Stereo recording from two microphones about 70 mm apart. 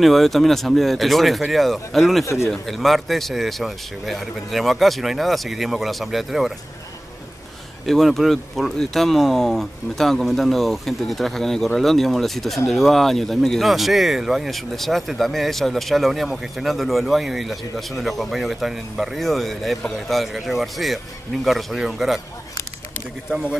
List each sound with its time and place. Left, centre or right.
0.0 s speech: centre
2.2 s speech: left
2.5 s speech: centre
7.8 s speech: centre
23.3 s a man's voice: centre